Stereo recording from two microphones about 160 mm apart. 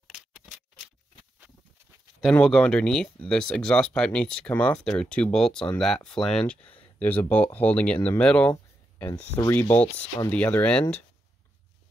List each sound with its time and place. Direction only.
2.2 s speech: centre (ahead or behind)